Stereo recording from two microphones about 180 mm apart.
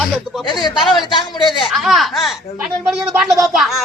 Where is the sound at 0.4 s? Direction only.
25° left (ahead or behind).